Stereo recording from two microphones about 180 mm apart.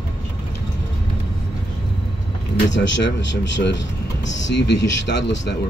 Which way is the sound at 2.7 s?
85° left.